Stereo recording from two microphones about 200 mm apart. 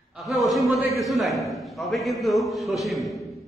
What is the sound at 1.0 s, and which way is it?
A man's voice, centre (ahead or behind).